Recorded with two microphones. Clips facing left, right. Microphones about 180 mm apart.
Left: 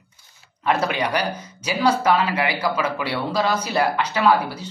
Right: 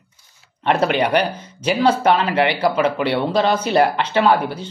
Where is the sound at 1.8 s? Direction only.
30° right (ahead or behind).